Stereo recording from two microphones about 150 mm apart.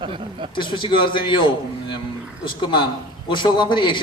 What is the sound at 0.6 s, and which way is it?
A man's voice, 35° left (ahead or behind).